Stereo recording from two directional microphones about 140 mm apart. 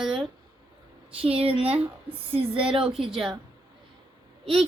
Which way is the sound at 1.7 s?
40° right (ahead or behind).